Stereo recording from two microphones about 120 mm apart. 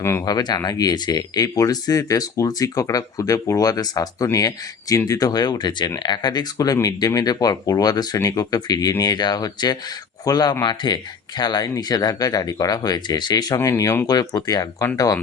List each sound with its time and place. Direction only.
0.0 s speech: 20° left (ahead or behind)
0.3 s speech: 35° left (ahead or behind)